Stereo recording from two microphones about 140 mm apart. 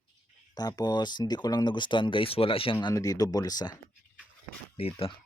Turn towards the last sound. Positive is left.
turn(degrees=40)  # may be behind; listen again after turning